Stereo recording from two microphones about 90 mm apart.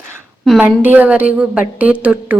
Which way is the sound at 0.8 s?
20° right (ahead or behind).